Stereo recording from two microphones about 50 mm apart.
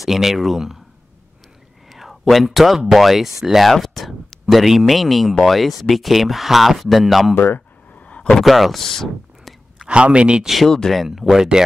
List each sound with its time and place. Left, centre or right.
0.0 s speech: centre
1.9 s a sound: centre
2.8 s speech: centre
7.3 s a sound: left
8.2 s a sound: centre
8.5 s speech: centre
8.8 s speech: centre
9.4 s whispering: centre
9.8 s speech: right
10.9 s speech: centre